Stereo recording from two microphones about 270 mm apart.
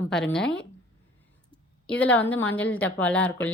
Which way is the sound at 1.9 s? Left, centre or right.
Centre.